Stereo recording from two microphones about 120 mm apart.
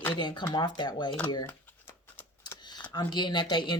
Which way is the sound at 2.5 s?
35° left (ahead or behind).